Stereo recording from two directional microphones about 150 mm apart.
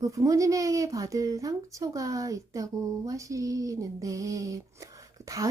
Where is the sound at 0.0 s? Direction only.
20° right (ahead or behind).